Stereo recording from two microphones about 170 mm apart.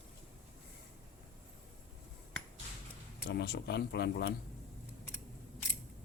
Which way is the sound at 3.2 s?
75° left (ahead or behind).